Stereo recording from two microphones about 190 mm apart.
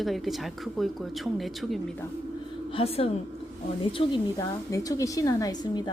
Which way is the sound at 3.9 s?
20° left (ahead or behind).